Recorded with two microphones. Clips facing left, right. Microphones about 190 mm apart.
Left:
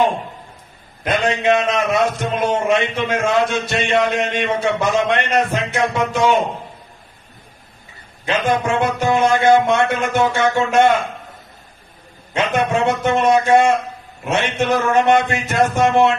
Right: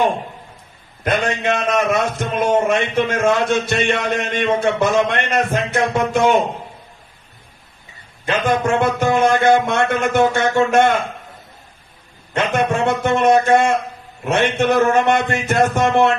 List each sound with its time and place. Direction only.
1.0 s a man's voice: 50° right (ahead or behind)
8.4 s a man's voice: 50° right (ahead or behind)
12.4 s a man's voice: 50° right (ahead or behind)